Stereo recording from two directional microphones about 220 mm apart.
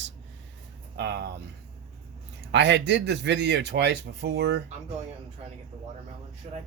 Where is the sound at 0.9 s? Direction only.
50° right (ahead or behind).